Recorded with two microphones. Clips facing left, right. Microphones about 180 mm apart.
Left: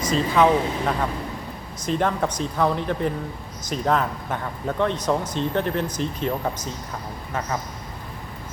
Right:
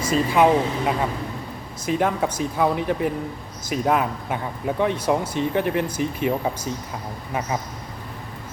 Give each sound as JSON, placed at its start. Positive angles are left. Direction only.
{"t": 0.0, "sound": "speech", "side_deg": -10}